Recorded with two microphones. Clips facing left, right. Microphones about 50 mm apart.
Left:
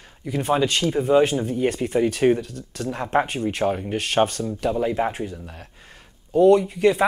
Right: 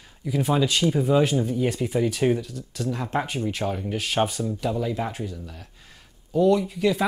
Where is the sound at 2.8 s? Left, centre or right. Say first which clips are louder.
Left 4 dB; left.